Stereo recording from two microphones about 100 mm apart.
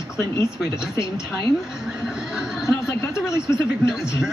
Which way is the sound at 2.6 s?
30° left (ahead or behind).